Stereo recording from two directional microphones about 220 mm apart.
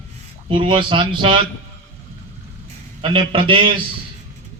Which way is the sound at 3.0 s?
25° right (ahead or behind).